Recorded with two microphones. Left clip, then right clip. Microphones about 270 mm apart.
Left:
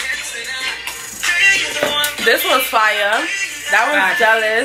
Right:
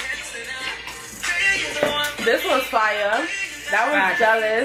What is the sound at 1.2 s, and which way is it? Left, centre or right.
Speech, centre.